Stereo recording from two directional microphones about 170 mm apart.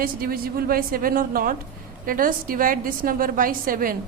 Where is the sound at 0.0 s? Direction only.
60° right (ahead or behind).